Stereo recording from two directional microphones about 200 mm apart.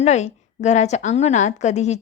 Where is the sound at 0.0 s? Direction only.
35° left (ahead or behind).